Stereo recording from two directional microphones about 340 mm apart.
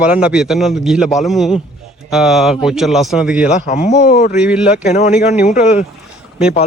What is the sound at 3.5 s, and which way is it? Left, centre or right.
Speech, centre.